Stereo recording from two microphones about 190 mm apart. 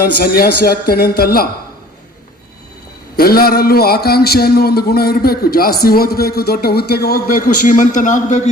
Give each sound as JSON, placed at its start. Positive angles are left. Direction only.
{"t": 0.0, "sound": "a man's voice", "side_deg": 50}
{"t": 3.2, "sound": "a man's voice", "side_deg": 50}